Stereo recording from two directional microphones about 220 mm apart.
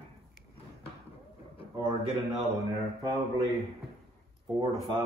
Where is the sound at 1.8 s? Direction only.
15° right (ahead or behind).